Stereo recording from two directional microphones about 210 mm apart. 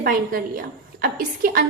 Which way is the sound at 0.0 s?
45° right (ahead or behind).